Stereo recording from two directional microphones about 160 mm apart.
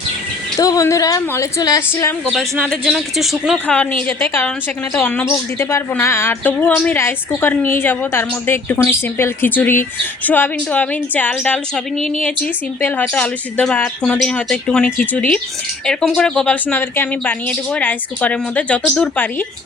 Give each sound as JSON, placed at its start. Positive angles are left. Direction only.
{"t": 0.5, "sound": "a woman's voice", "side_deg": 20}
{"t": 2.3, "sound": "speech", "side_deg": 0}
{"t": 3.8, "sound": "a woman's voice", "side_deg": 10}